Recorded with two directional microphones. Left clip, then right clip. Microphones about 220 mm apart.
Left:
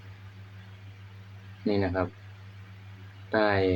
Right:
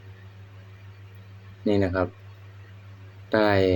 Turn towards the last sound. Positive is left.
turn(degrees=-20)  # may be behind; listen again after turning